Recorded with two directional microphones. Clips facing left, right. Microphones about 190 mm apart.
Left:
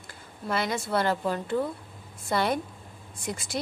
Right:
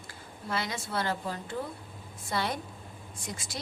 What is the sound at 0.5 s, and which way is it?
A woman's voice, 55° left (ahead or behind).